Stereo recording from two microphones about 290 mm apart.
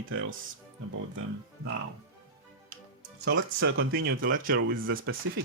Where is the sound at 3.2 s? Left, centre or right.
Right.